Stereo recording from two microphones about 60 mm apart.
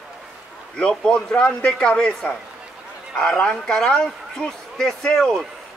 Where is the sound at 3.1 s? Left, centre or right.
Centre.